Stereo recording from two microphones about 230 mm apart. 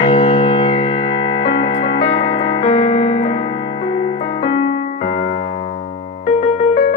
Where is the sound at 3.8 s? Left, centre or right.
Left.